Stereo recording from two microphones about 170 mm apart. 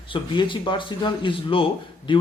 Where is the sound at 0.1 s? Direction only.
30° left (ahead or behind).